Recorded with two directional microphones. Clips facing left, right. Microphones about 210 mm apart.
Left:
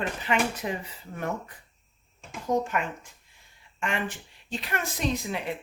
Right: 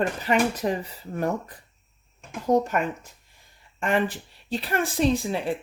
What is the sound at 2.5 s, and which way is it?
Speech, 40° right (ahead or behind).